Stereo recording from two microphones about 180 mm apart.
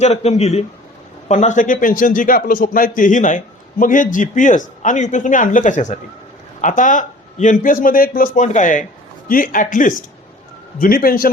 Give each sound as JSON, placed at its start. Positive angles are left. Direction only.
{"t": 0.0, "sound": "a man's voice", "side_deg": 40}